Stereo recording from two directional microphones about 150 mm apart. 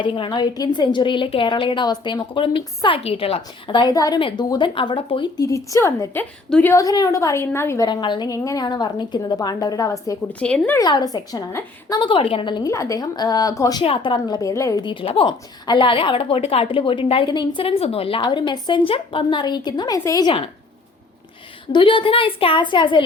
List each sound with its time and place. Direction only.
0.0 s a woman's voice: 30° left (ahead or behind)
7.9 s a woman's voice: 30° left (ahead or behind)
10.4 s speech: 5° left (ahead or behind)
10.8 s a woman's voice: 25° left (ahead or behind)
13.8 s a woman's voice: 35° left (ahead or behind); by 14.8 s 20° left (ahead or behind)
14.8 s a woman's voice: 35° left (ahead or behind)
21.7 s a woman's voice: 35° left (ahead or behind)